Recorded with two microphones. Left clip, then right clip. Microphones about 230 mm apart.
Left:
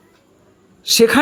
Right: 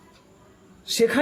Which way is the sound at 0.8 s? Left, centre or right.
Left.